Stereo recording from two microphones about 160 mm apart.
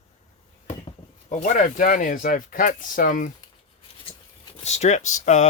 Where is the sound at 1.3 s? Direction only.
50° left (ahead or behind).